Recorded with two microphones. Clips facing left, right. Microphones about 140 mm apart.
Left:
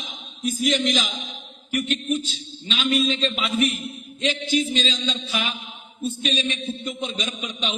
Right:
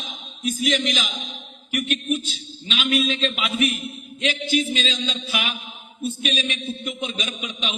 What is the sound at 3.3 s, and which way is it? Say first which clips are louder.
Speech: left 1 dB; centre (ahead or behind).